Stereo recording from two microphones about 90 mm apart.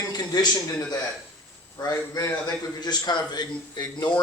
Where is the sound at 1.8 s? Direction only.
45° left (ahead or behind).